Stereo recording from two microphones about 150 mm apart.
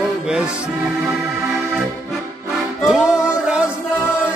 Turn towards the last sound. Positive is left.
turn(degrees=-5)  # may be behind; listen again after turning